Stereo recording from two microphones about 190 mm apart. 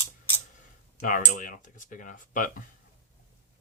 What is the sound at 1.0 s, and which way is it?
Speech, 45° left (ahead or behind).